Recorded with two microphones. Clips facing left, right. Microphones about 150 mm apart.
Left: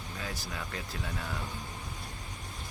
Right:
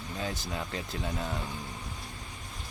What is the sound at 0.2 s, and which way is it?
Speech, 25° right (ahead or behind).